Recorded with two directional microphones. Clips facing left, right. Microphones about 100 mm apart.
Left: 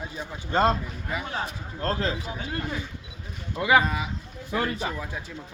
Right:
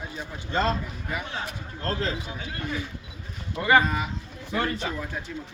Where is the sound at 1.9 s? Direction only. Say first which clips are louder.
Even; 30° left (ahead or behind).